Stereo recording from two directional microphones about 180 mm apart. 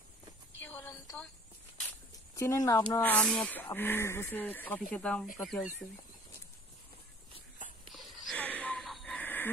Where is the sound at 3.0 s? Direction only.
10° left (ahead or behind).